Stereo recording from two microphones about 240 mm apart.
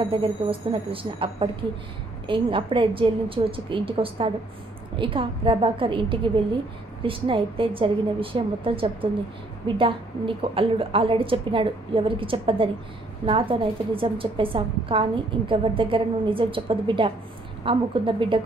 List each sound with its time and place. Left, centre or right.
0.1 s a woman's voice: right